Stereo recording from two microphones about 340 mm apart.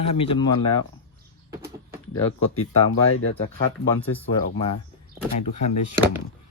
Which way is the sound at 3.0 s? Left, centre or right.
Left.